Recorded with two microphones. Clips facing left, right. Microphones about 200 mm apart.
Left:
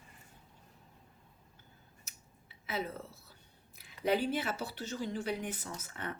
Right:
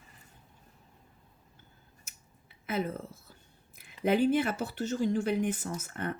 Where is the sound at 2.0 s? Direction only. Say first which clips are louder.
Even; 50° right (ahead or behind).